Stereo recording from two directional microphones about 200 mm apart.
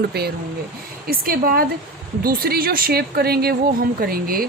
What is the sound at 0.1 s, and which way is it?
Speech, 50° right (ahead or behind).